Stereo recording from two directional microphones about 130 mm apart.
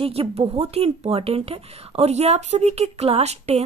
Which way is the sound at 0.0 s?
50° right (ahead or behind).